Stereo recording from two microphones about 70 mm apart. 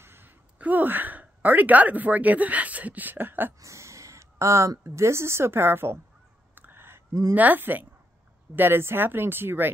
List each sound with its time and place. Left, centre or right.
0.0 s a sound: right
0.6 s speech: right
3.5 s speech: right
6.5 s a sound: right
7.1 s speech: right
7.3 s speech: right